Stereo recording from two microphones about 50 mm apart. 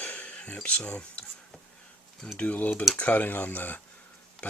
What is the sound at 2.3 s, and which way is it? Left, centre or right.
Speech, left.